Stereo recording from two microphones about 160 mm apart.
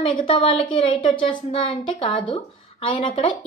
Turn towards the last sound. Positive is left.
turn(degrees=30)  # may be behind; listen again after turning